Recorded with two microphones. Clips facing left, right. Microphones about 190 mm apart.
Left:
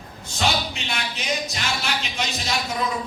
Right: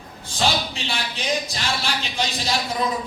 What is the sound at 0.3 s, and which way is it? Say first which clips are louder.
Speech: right 1 dB; 30° right (ahead or behind).